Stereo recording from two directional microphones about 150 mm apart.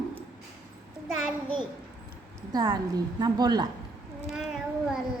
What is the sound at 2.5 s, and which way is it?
A woman's voice, 25° right (ahead or behind).